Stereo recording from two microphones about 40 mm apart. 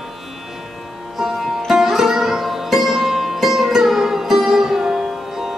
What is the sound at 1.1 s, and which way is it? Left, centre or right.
Sitar, centre.